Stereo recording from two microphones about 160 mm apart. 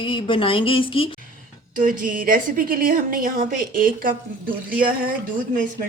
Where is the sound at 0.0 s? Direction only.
30° left (ahead or behind).